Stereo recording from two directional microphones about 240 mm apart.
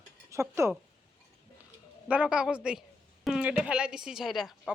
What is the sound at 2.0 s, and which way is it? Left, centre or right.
Speech, centre.